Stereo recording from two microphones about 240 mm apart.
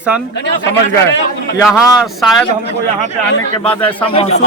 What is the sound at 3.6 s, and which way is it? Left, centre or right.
Speech, left.